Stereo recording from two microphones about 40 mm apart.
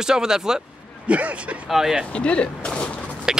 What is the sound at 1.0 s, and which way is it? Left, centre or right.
Speech, right.